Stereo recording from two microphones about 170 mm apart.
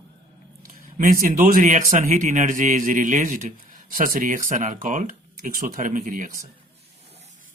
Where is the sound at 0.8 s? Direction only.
55° right (ahead or behind).